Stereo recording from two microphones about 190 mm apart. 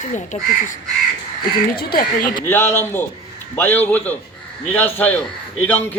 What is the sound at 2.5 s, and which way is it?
A man's voice, 15° left (ahead or behind).